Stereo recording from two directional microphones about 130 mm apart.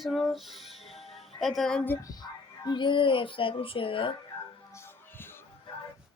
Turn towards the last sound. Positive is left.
turn(degrees=20)  # may be behind; listen again after turning